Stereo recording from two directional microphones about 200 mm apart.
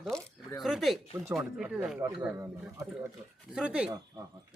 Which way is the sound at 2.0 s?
15° right (ahead or behind).